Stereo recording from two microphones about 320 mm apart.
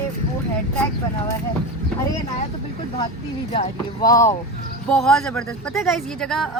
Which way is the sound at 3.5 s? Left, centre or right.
Centre.